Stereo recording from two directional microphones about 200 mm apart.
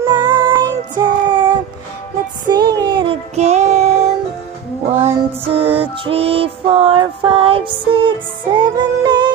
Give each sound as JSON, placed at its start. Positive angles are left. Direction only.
{"t": 0.0, "sound": "child singing", "side_deg": -20}
{"t": 5.0, "sound": "music", "side_deg": -30}